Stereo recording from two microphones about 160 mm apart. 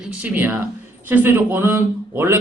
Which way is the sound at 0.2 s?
10° right (ahead or behind).